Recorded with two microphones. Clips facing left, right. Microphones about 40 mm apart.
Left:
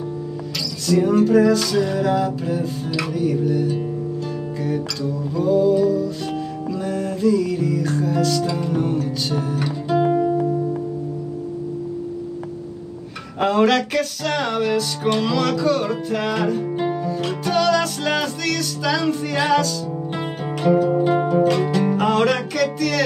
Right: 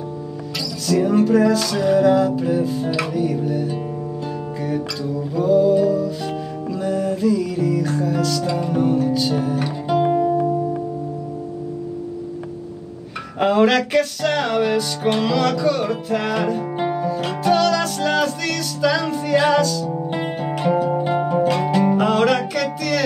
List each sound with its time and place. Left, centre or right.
0.8 s music: centre
5.3 s music: centre
13.4 s music: centre
16.7 s music: centre
17.6 s music: centre
20.1 s music: centre